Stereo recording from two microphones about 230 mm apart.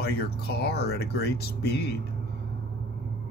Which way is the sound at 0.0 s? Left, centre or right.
Left.